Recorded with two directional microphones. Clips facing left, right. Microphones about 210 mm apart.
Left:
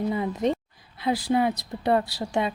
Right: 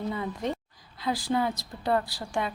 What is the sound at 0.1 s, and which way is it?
A woman's voice, 20° left (ahead or behind).